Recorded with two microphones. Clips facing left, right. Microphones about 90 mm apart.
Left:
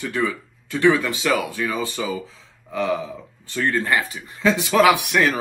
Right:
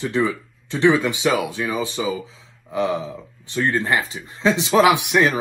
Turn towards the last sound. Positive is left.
turn(degrees=-20)  # may be behind; listen again after turning